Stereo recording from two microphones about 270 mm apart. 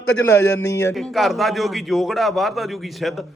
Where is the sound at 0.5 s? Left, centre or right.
Centre.